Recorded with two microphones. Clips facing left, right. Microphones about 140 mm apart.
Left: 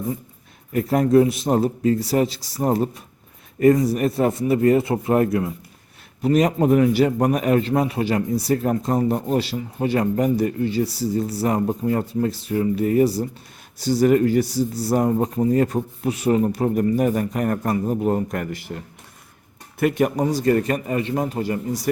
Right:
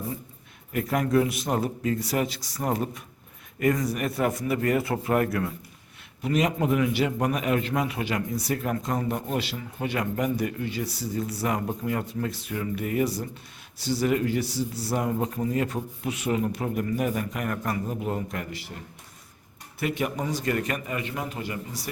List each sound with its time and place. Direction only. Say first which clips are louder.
0.7 s a man's voice: left 7 dB; 35° left (ahead or behind)
6.2 s a man's voice: left 7 dB; 40° left (ahead or behind)
19.8 s a man's voice: left 9 dB; 45° left (ahead or behind)